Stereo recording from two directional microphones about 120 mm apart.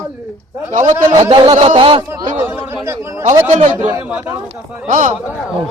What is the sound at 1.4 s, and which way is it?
Speech, 50° right (ahead or behind).